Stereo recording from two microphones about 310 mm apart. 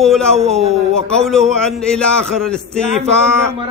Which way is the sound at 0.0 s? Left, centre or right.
Centre.